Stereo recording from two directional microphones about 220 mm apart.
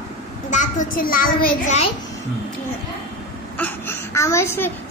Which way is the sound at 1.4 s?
40° left (ahead or behind).